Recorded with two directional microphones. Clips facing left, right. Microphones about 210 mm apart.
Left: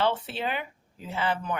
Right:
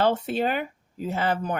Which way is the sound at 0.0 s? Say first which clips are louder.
Right 5 dB; 45° right (ahead or behind).